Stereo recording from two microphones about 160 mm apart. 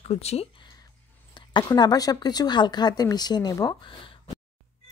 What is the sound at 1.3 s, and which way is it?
A woman's voice, 30° left (ahead or behind).